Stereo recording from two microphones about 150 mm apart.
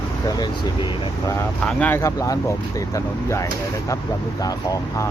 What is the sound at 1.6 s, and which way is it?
Speech, 10° left (ahead or behind).